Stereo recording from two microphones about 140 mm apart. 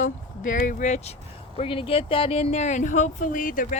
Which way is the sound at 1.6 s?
40° left (ahead or behind).